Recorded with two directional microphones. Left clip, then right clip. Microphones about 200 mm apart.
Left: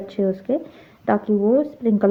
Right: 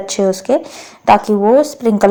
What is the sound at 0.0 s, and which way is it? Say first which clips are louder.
A woman's voice: right 8 dB; 10° right (ahead or behind).